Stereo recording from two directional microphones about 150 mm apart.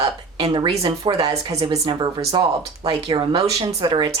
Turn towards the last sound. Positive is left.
turn(degrees=-30)  # may be behind; listen again after turning